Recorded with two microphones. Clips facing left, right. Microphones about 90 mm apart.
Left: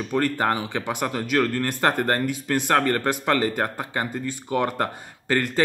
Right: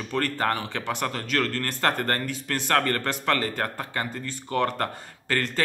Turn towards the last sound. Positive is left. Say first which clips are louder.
# left 4 dB
turn(degrees=15)  # may be behind; listen again after turning